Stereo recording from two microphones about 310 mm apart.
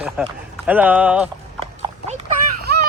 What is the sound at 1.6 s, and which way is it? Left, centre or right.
Clip-clop, centre.